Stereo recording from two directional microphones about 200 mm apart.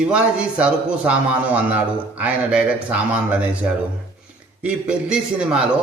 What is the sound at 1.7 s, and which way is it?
Speech, 10° right (ahead or behind).